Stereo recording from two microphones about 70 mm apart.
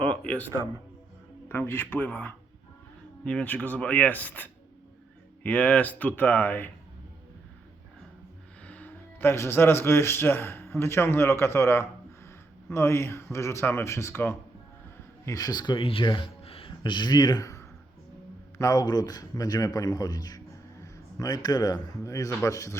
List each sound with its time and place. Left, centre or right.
0.0 s music: centre
1.5 s a man's voice: left
8.6 s speech: left
15.3 s speech: left
17.4 s a sound: left
18.6 s a man's voice: left